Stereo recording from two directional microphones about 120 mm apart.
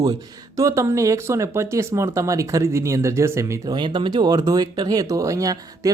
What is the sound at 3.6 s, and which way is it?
Speech, 40° right (ahead or behind).